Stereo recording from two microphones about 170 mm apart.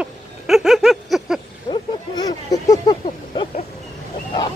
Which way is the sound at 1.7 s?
25° left (ahead or behind).